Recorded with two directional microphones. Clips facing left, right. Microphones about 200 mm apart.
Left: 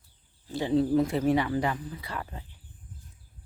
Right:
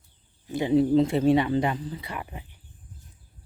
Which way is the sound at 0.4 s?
15° right (ahead or behind).